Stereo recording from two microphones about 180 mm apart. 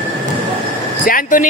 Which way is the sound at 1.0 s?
50° left (ahead or behind).